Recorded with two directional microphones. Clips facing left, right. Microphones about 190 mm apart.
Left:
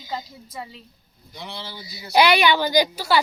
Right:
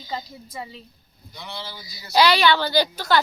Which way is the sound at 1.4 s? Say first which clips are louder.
Left 1 dB; 25° left (ahead or behind).